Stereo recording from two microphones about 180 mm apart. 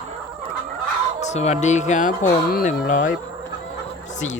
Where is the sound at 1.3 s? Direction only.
40° left (ahead or behind).